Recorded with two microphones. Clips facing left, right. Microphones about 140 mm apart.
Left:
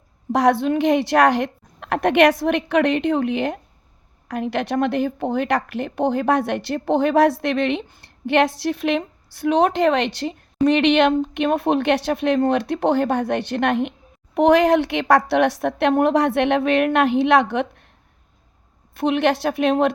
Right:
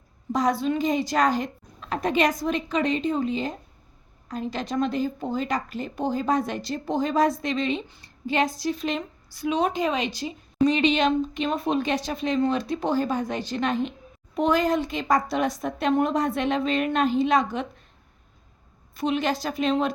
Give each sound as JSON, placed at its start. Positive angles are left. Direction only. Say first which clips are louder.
{"t": 0.3, "sound": "a woman's voice", "louder": "left 6 dB", "side_deg": 70}
{"t": 18.9, "sound": "a woman's voice", "louder": "left 6 dB", "side_deg": 60}